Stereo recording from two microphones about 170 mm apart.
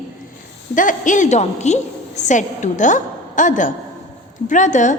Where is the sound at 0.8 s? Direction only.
50° left (ahead or behind).